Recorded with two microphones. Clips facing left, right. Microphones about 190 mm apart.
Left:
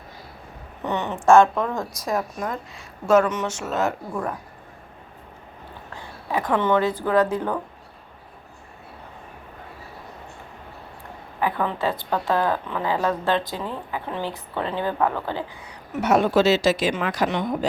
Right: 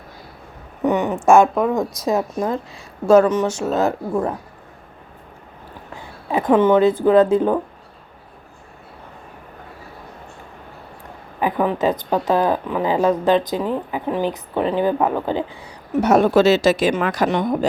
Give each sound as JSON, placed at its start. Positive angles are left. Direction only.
{"t": 0.9, "sound": "a woman's voice", "side_deg": -15}
{"t": 6.3, "sound": "speech", "side_deg": -20}
{"t": 11.3, "sound": "a woman's voice", "side_deg": -15}
{"t": 15.6, "sound": "a woman's voice", "side_deg": -40}